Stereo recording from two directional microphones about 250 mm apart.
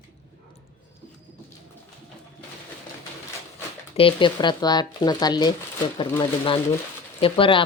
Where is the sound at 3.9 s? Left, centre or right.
Left.